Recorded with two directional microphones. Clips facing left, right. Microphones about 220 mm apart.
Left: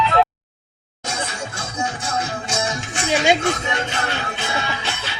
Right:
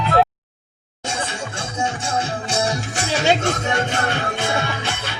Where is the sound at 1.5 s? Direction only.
30° right (ahead or behind); by 5.1 s 50° right (ahead or behind).